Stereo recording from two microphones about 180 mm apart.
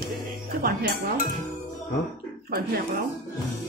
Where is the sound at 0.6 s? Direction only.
55° right (ahead or behind).